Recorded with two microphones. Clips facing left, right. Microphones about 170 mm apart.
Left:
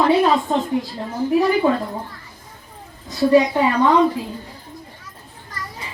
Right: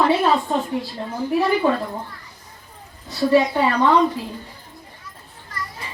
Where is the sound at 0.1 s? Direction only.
15° left (ahead or behind).